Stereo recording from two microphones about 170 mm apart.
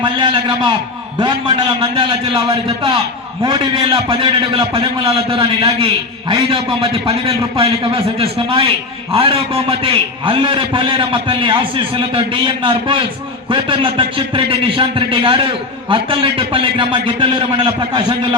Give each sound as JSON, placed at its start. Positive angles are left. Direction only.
{"t": 0.0, "sound": "a man's voice", "side_deg": -30}